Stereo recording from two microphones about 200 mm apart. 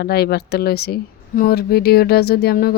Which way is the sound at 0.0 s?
50° left (ahead or behind).